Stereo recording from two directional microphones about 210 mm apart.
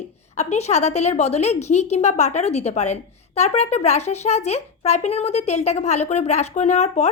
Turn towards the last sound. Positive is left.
turn(degrees=30)  # may be behind; listen again after turning